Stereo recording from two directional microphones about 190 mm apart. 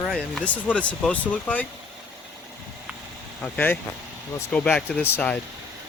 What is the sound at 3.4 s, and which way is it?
Speech, 10° left (ahead or behind).